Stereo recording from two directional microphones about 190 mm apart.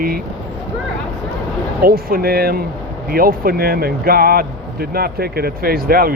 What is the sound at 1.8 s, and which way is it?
Speech, 50° right (ahead or behind).